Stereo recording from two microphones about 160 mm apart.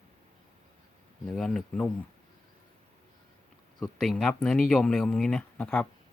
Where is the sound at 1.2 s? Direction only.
5° left (ahead or behind).